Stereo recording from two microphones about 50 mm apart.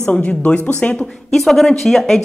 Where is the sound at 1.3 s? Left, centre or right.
Centre.